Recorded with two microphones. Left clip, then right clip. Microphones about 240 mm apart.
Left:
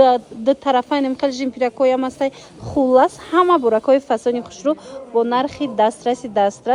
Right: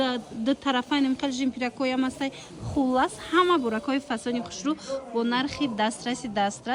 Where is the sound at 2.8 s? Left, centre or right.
Left.